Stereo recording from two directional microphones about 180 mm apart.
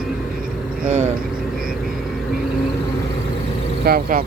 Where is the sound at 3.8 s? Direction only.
55° right (ahead or behind).